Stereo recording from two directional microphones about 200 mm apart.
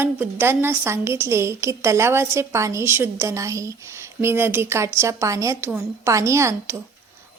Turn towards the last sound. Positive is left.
turn(degrees=-15)  # may be behind; listen again after turning